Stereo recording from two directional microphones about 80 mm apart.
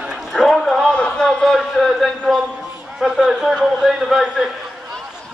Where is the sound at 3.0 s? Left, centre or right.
Centre.